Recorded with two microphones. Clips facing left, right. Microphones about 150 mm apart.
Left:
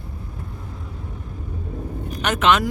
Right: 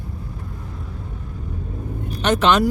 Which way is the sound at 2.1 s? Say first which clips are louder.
Right 2 dB; 35° right (ahead or behind).